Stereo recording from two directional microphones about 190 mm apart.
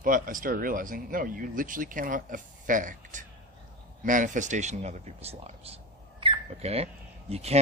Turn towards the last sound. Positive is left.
turn(degrees=-35)  # may be behind; listen again after turning